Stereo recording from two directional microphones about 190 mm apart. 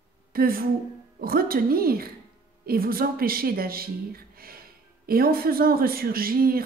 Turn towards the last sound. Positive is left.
turn(degrees=-50)  # may be behind; listen again after turning